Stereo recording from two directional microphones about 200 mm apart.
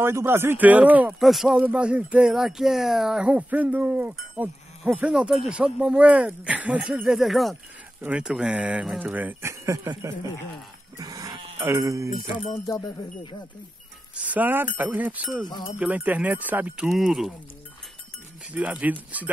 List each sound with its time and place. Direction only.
0.0 s speech: 10° right (ahead or behind)
12.3 s speech: 30° left (ahead or behind)
12.6 s speech: 20° left (ahead or behind)
14.1 s speech: 5° right (ahead or behind)
15.4 s speech: 20° left (ahead or behind)
15.8 s speech: 5° right (ahead or behind)
18.5 s speech: 5° right (ahead or behind)